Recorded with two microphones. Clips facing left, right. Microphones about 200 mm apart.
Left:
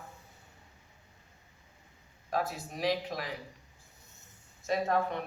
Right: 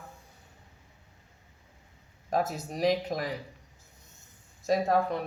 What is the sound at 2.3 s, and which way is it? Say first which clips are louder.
Speech: right 4 dB; 45° right (ahead or behind).